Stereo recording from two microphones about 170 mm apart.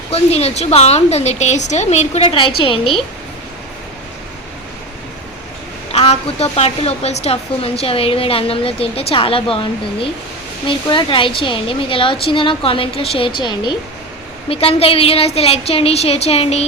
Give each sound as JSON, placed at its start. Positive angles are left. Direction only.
{"t": 0.1, "sound": "a woman's voice", "side_deg": 35}
{"t": 5.9, "sound": "a woman's voice", "side_deg": 35}